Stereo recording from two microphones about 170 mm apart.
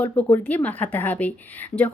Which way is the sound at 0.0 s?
15° left (ahead or behind).